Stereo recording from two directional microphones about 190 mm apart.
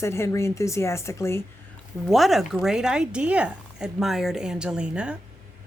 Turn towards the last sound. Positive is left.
turn(degrees=-5)  # may be behind; listen again after turning